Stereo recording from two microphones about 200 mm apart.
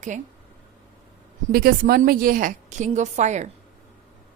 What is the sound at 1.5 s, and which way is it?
A woman's voice, 45° right (ahead or behind).